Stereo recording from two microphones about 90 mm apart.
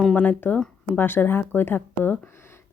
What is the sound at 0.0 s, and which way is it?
Speech, 15° left (ahead or behind).